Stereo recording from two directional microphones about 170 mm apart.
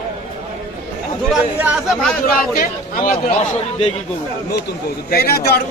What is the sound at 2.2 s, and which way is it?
Speech, 55° left (ahead or behind).